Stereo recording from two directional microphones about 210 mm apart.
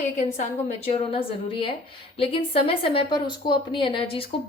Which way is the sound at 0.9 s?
25° left (ahead or behind).